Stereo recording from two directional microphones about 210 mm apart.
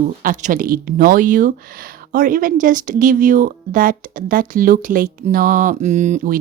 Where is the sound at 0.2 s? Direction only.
40° right (ahead or behind).